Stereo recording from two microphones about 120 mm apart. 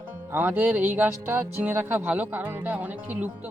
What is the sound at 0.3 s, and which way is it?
Speech, 15° right (ahead or behind).